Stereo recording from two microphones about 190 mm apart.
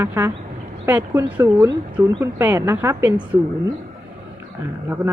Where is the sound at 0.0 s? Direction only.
10° right (ahead or behind).